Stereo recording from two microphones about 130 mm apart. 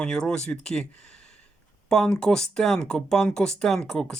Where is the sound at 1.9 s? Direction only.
5° left (ahead or behind).